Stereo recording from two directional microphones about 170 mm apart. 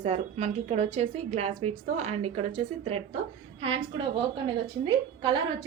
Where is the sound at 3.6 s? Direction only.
30° right (ahead or behind).